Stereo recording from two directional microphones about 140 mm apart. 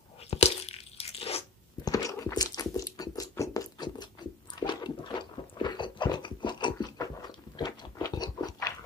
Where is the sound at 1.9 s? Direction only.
25° left (ahead or behind).